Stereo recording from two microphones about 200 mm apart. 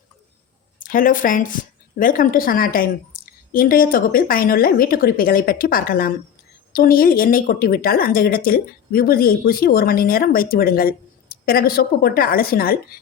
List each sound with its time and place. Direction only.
0.8 s a woman's voice: 45° left (ahead or behind)